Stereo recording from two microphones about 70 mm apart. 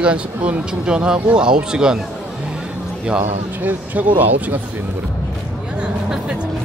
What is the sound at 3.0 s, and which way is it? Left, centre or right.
Speech, right.